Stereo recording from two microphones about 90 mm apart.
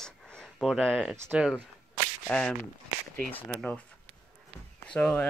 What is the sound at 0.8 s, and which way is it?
Speech, centre (ahead or behind).